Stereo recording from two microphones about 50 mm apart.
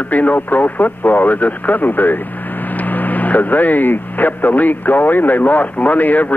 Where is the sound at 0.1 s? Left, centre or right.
Left.